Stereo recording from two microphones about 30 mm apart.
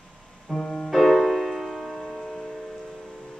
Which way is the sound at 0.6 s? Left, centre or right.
Left.